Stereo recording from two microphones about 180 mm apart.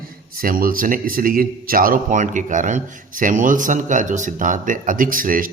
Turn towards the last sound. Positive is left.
turn(degrees=-50)  # may be behind; listen again after turning